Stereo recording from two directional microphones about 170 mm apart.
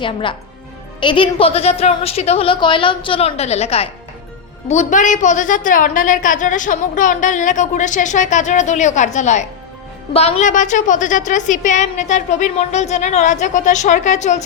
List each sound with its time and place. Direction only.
0.0 s a woman's voice: 30° left (ahead or behind)